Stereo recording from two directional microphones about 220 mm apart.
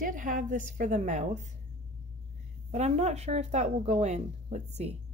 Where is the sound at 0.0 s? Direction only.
40° right (ahead or behind).